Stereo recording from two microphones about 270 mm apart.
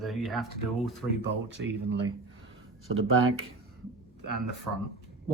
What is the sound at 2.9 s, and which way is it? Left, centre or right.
Speech, right.